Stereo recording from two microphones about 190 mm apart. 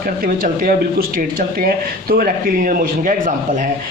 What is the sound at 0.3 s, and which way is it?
Speech, 50° right (ahead or behind).